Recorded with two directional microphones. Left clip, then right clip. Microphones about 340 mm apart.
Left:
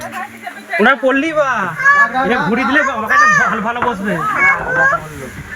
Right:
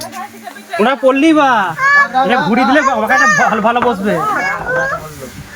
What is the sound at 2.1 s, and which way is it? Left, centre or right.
Speech, centre.